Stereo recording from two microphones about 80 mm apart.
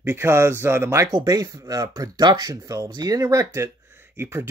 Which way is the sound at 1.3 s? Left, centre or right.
Right.